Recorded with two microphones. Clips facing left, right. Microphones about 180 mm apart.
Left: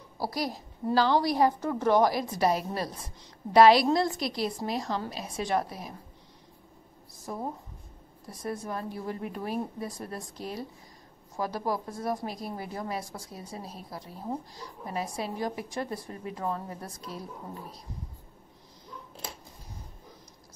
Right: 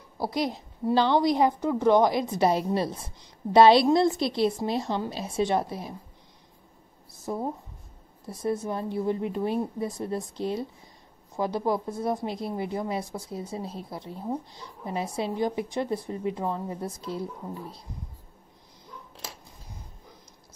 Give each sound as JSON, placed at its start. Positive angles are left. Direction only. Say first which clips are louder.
{"t": 0.2, "sound": "a woman's voice", "louder": "right 4 dB", "side_deg": -20}
{"t": 7.2, "sound": "a woman's voice", "louder": "right 5 dB", "side_deg": -20}